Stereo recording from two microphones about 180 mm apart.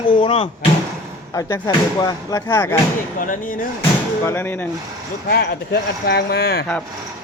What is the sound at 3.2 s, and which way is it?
Speech, 50° left (ahead or behind).